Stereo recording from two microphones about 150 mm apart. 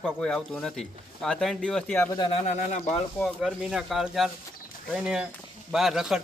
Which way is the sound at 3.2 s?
Centre (ahead or behind).